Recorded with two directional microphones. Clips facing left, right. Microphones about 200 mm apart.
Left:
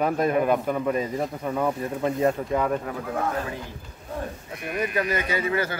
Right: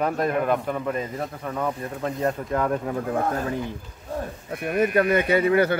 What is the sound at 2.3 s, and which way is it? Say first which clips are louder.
Speech: left 1 dB; centre (ahead or behind).